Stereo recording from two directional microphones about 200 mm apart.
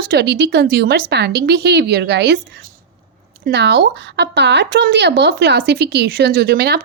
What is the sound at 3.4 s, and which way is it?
Speech, 55° right (ahead or behind).